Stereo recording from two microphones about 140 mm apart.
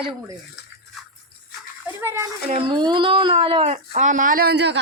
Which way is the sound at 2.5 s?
40° right (ahead or behind).